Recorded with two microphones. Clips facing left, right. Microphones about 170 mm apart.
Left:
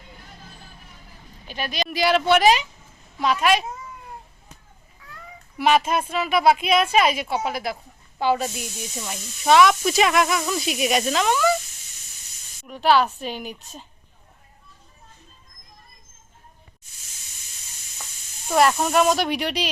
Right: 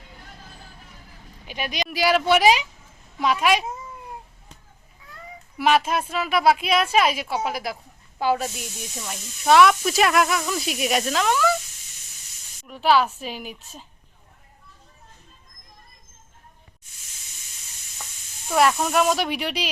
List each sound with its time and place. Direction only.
1.5 s speech: 15° right (ahead or behind)
5.5 s speech: centre (ahead or behind)
12.6 s speech: centre (ahead or behind)
18.5 s speech: centre (ahead or behind)